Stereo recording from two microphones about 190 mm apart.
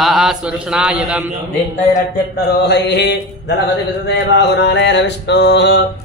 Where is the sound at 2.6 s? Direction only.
60° left (ahead or behind).